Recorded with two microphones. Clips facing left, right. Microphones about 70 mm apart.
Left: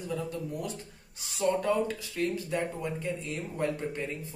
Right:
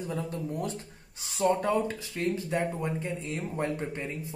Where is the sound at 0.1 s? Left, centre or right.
Right.